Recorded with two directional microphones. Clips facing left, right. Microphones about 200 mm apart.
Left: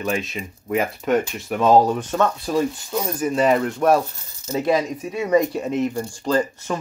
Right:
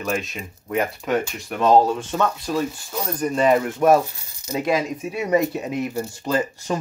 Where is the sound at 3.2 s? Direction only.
Centre (ahead or behind).